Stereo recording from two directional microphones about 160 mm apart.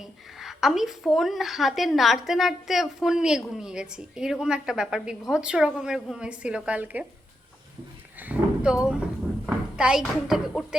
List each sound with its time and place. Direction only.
0.0 s a woman's voice: centre (ahead or behind)
8.2 s a woman's voice: 5° right (ahead or behind)